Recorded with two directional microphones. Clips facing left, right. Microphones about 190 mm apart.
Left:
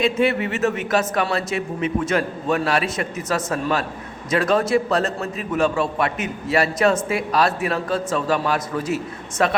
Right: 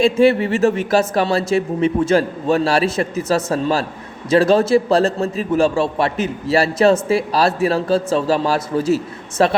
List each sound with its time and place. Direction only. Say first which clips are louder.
0.0 s a man's voice: right 6 dB; 30° right (ahead or behind)